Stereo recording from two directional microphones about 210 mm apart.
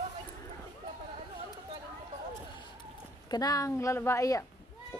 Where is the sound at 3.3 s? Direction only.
15° left (ahead or behind).